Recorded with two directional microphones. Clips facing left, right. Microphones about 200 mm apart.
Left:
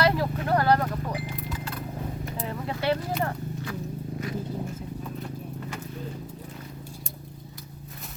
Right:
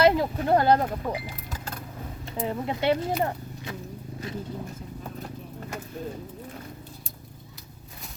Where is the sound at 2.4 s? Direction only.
20° right (ahead or behind).